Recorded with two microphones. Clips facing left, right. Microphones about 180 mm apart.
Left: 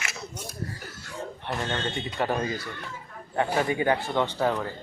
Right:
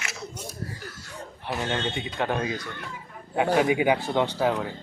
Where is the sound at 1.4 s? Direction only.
5° right (ahead or behind).